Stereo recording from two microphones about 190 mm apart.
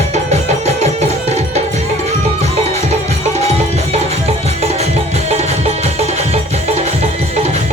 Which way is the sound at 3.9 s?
35° right (ahead or behind).